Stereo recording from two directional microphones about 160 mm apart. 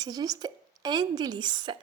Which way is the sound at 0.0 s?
25° right (ahead or behind).